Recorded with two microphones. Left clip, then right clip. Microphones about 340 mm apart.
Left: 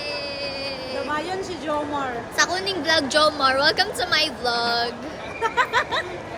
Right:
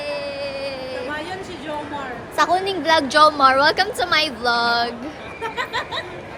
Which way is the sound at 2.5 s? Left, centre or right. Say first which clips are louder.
Right 4 dB; centre.